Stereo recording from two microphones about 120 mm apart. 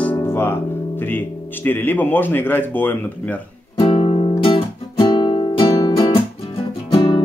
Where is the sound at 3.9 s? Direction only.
50° left (ahead or behind); by 5.9 s 35° left (ahead or behind).